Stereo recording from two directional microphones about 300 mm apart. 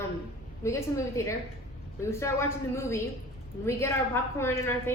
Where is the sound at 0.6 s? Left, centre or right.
Centre.